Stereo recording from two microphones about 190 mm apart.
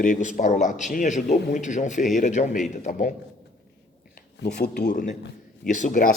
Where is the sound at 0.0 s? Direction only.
40° left (ahead or behind).